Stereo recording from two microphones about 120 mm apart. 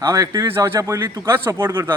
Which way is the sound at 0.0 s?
25° right (ahead or behind).